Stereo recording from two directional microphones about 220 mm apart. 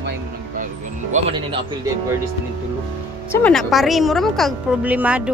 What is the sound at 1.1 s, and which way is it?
Speech, 25° right (ahead or behind).